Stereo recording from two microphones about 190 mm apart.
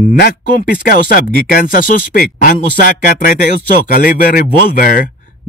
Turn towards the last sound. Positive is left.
turn(degrees=45)  # may be behind; listen again after turning